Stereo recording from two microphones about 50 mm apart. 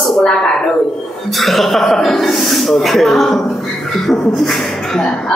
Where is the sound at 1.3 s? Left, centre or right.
Centre.